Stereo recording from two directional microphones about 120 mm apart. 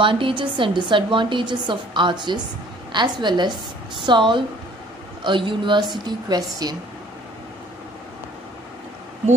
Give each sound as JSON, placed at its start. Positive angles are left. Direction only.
{"t": 0.0, "sound": "a woman's voice", "side_deg": -45}